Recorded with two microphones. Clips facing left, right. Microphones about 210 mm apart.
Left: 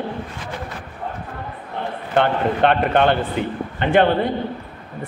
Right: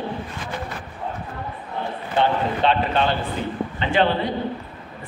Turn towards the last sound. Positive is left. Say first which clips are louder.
# left 4 dB
turn(degrees=55)  # may be behind; listen again after turning